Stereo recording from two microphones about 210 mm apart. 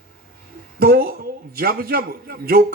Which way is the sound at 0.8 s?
45° right (ahead or behind).